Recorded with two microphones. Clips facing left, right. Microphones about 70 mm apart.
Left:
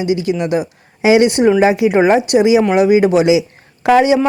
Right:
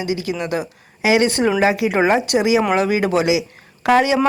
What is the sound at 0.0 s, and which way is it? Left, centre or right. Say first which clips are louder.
Speech: left 6 dB; left.